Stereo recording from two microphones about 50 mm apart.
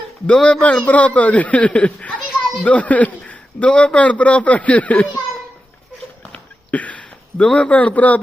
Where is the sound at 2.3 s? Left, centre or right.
Centre.